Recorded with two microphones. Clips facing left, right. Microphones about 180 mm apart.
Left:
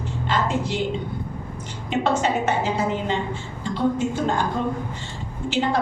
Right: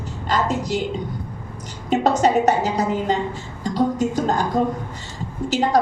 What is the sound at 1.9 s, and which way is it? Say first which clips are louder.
A woman's voice: right 5 dB; 40° right (ahead or behind).